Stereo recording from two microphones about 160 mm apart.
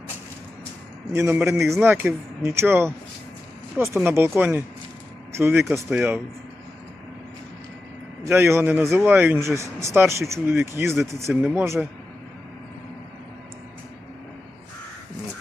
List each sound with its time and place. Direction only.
1.1 s speech: 15° right (ahead or behind)
5.6 s speech: 5° right (ahead or behind)
8.2 s speech: 15° right (ahead or behind)